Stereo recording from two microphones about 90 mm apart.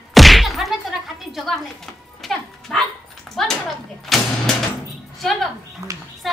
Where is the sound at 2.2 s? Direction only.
Centre (ahead or behind).